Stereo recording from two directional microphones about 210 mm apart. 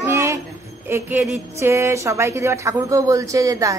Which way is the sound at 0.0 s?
15° right (ahead or behind).